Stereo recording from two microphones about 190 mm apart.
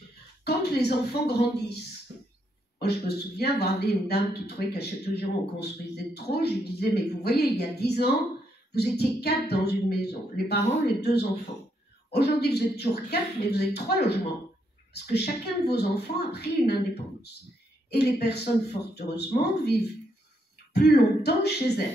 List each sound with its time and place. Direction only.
0.4 s speech: 60° left (ahead or behind)
2.8 s speech: 60° left (ahead or behind)
15.1 s speech: 60° left (ahead or behind)
17.8 s speech: 60° left (ahead or behind)